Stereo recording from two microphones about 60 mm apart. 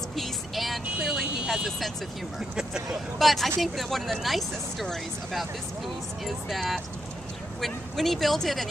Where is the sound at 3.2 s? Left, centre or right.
Centre.